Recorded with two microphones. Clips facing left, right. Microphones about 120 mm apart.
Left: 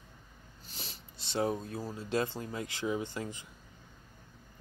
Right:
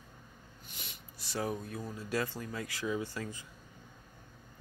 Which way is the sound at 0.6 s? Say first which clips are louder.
Left 4 dB; 35° left (ahead or behind).